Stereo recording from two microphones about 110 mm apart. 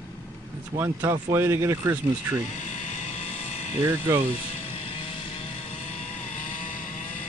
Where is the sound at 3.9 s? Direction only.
25° right (ahead or behind).